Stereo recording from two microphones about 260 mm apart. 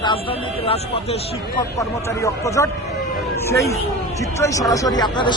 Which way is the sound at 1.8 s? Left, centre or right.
Centre.